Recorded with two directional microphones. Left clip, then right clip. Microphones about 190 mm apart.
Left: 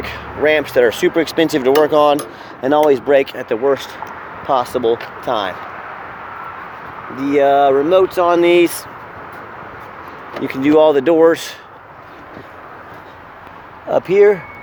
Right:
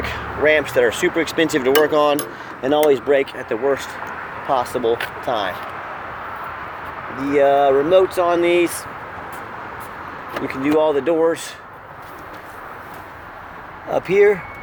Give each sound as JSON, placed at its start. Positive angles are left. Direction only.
{"t": 0.0, "sound": "speech", "side_deg": 30}
{"t": 3.2, "sound": "speech", "side_deg": 45}
{"t": 7.2, "sound": "speech", "side_deg": 50}
{"t": 10.4, "sound": "speech", "side_deg": 50}
{"t": 13.9, "sound": "speech", "side_deg": 40}